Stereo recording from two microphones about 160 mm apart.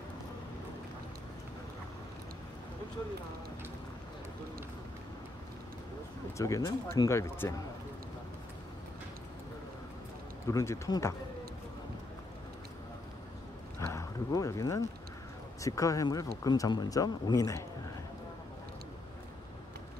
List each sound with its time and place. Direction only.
6.3 s speech: 20° left (ahead or behind)
10.4 s speech: 20° left (ahead or behind)
13.7 s a sound: 20° left (ahead or behind)
15.6 s speech: 20° left (ahead or behind)